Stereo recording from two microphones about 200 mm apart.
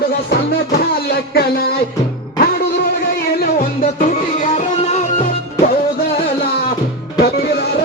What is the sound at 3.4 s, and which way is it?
Music, 45° left (ahead or behind).